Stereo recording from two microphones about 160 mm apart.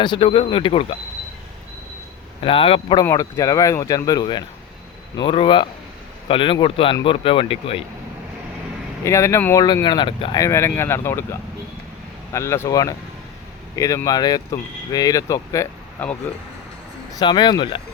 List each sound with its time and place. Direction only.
0.0 s speech: 30° left (ahead or behind)
2.4 s speech: 35° left (ahead or behind)
3.0 s speech: 20° left (ahead or behind)
9.0 s speech: 20° left (ahead or behind)
10.4 s speech: 15° left (ahead or behind)
17.2 s speech: 30° left (ahead or behind)